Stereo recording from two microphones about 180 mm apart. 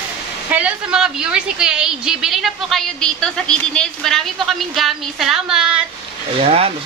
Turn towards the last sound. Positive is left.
turn(degrees=-35)  # may be behind; listen again after turning